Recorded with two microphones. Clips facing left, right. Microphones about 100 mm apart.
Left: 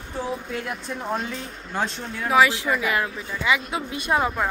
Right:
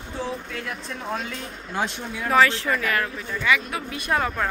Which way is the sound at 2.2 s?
10° left (ahead or behind).